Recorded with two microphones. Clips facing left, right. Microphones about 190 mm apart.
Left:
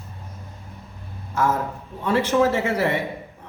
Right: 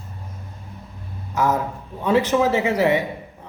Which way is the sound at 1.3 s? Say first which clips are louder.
Right 1 dB; 15° right (ahead or behind).